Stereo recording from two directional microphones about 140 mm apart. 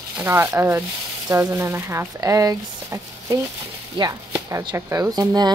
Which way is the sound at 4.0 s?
35° right (ahead or behind).